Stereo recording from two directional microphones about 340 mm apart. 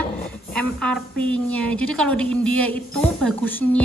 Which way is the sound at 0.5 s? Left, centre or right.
Centre.